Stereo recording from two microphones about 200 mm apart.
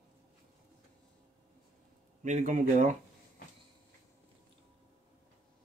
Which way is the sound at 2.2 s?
40° right (ahead or behind).